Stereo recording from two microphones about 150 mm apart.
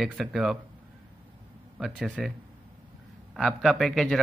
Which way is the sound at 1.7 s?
Centre (ahead or behind).